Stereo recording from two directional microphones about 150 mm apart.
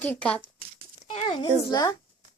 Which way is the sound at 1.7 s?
25° left (ahead or behind).